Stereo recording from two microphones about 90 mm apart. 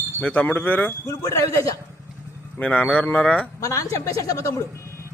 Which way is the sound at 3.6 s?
40° left (ahead or behind).